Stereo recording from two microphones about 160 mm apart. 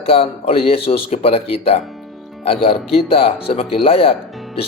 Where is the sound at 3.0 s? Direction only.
35° left (ahead or behind).